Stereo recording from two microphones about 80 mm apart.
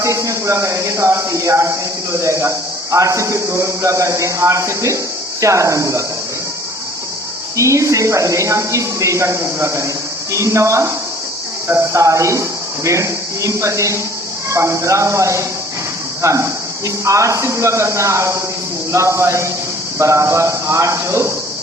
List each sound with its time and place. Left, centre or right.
0.0 s speech: right
7.5 s speech: right